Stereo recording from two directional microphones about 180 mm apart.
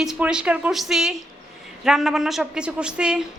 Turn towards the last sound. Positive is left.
turn(degrees=-5)  # may be behind; listen again after turning